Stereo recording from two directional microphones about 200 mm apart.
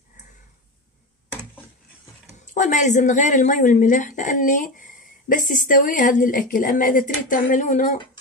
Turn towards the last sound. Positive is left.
turn(degrees=40)  # may be behind; listen again after turning